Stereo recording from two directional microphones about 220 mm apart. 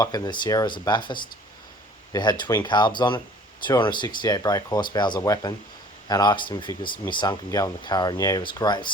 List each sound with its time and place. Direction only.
0.0 s speech: 15° left (ahead or behind)
2.4 s speech: 15° left (ahead or behind)